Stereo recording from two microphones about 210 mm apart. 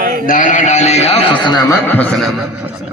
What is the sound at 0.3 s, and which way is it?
A man's voice, 40° left (ahead or behind).